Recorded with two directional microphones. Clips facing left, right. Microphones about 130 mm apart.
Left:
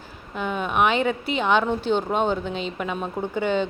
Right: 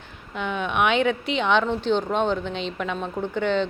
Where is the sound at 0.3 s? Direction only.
5° left (ahead or behind).